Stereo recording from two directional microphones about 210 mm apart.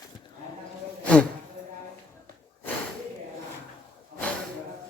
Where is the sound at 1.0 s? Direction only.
5° left (ahead or behind).